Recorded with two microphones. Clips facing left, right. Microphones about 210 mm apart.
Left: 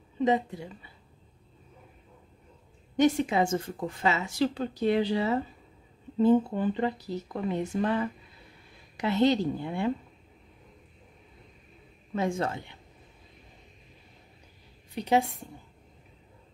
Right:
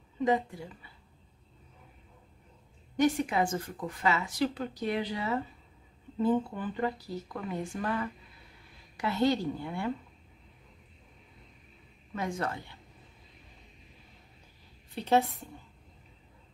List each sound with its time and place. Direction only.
0.2 s a woman's voice: 20° left (ahead or behind)
3.0 s a woman's voice: 25° left (ahead or behind)
12.2 s a woman's voice: 25° left (ahead or behind)
15.0 s a woman's voice: 15° left (ahead or behind)